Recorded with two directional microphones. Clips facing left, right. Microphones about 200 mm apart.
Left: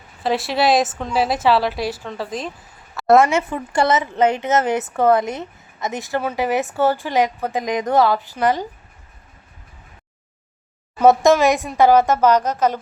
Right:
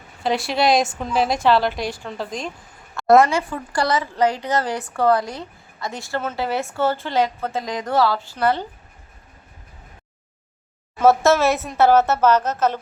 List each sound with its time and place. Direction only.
0.2 s a woman's voice: centre (ahead or behind)
2.9 s a sound: centre (ahead or behind)
3.2 s a woman's voice: 25° left (ahead or behind)
11.0 s a woman's voice: 15° left (ahead or behind)